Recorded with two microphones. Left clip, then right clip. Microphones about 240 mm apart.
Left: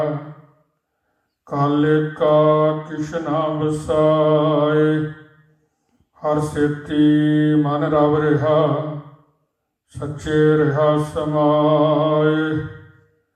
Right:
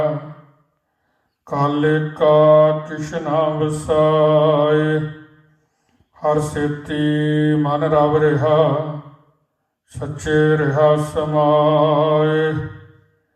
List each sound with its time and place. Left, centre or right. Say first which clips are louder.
1.5 s mantra: even; right
6.1 s mantra: right 1 dB; right
9.9 s mantra: right 2 dB; right